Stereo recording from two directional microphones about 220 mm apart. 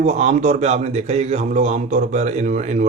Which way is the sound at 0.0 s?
30° right (ahead or behind).